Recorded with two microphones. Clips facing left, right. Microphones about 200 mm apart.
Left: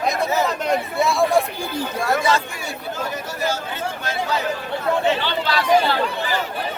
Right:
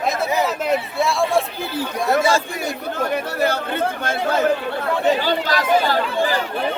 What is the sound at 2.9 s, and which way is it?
Speech, 60° right (ahead or behind).